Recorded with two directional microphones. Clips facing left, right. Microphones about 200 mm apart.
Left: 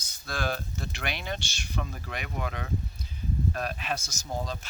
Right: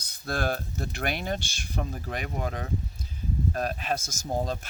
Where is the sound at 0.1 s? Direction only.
55° right (ahead or behind).